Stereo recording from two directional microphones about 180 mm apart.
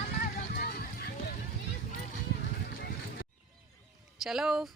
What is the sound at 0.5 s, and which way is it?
Music, 65° left (ahead or behind).